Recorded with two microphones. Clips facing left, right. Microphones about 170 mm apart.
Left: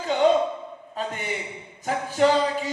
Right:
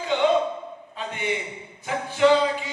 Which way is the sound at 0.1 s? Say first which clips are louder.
Left 1 dB; 40° left (ahead or behind).